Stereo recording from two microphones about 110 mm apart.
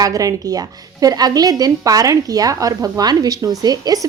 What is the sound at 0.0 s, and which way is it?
A woman's voice, 30° right (ahead or behind).